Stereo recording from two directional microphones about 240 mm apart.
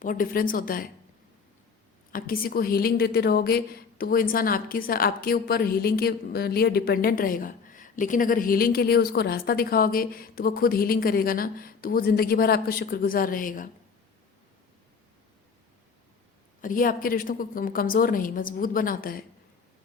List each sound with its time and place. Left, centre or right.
0.0 s a woman's voice: left
2.1 s a woman's voice: left
16.6 s a woman's voice: left